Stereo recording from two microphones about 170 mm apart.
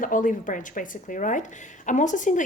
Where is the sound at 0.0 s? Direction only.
50° left (ahead or behind).